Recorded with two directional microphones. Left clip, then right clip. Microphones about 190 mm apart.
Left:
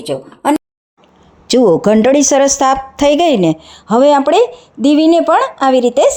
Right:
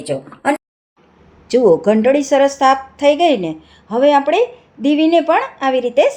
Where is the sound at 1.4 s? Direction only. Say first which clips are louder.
Left 2 dB; 45° left (ahead or behind).